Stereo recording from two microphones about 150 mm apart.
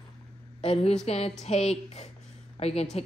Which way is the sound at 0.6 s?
40° left (ahead or behind).